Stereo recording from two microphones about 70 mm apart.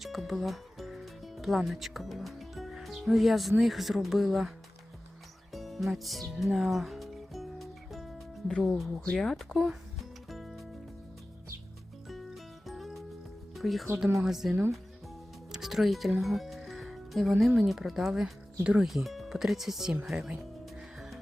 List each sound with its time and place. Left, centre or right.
0.0 s speech: centre
5.5 s speech: centre
6.4 s music: centre
8.6 s speech: centre
9.1 s music: centre
12.0 s music: centre
13.6 s speech: centre
15.5 s speech: centre
18.9 s speech: centre